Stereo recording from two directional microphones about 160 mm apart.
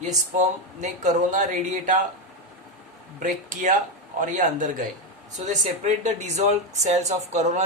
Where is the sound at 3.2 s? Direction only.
50° right (ahead or behind).